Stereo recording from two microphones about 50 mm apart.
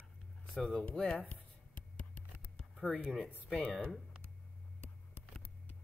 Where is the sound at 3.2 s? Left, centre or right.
Left.